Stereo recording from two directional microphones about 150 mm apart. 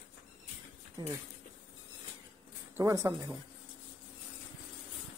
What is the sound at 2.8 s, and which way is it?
Speech, 20° right (ahead or behind).